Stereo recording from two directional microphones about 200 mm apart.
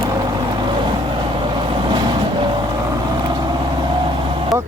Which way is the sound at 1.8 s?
25° right (ahead or behind).